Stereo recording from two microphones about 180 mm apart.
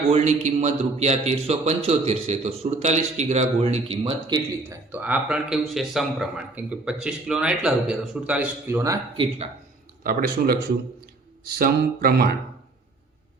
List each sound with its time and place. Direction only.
0.1 s a man's voice: 40° right (ahead or behind); by 9.0 s 15° right (ahead or behind)
10.0 s speech: 55° right (ahead or behind)